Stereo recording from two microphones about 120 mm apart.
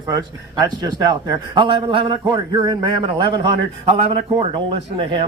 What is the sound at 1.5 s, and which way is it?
A man's voice, 45° right (ahead or behind).